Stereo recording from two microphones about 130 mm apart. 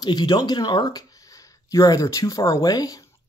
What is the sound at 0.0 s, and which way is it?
Speech, 35° left (ahead or behind).